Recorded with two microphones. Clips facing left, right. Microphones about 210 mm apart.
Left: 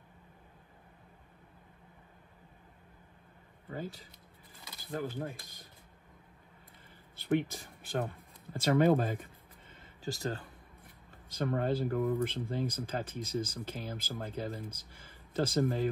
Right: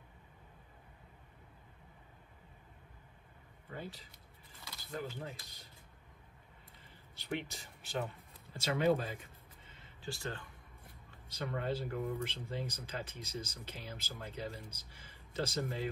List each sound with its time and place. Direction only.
3.7 s speech: 45° left (ahead or behind)
7.2 s speech: 50° left (ahead or behind)